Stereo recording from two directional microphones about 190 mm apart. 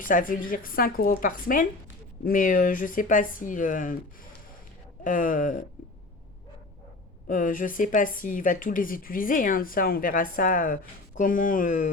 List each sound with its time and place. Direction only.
0.0 s speech: 45° left (ahead or behind)
5.0 s speech: 45° left (ahead or behind)
7.3 s speech: 45° left (ahead or behind)